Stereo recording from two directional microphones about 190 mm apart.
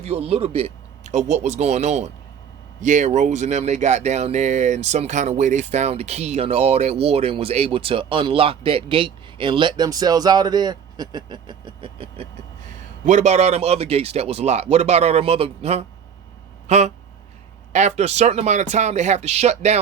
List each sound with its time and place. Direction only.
0.0 s speech: 30° right (ahead or behind)